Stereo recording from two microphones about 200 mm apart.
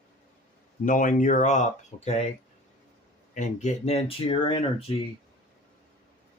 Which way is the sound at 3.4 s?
35° left (ahead or behind).